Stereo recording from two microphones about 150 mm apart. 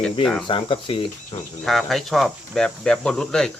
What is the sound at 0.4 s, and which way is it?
Speech, 35° left (ahead or behind).